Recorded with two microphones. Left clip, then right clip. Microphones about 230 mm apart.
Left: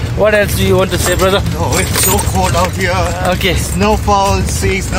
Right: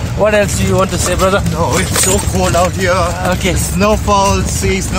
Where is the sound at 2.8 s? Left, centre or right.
Centre.